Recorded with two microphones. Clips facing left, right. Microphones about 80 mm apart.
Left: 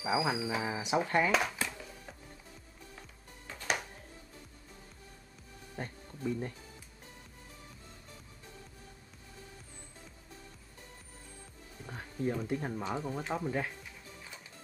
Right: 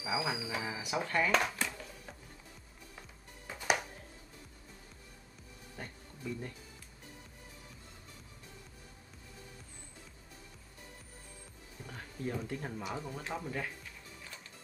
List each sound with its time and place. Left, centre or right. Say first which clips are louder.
0.2 s speech: left 4 dB; centre
1.3 s dishes: even; centre
3.0 s music: even; centre
5.8 s music: left 6 dB; left
11.8 s music: left 5 dB; centre
12.4 s speech: left 4 dB; centre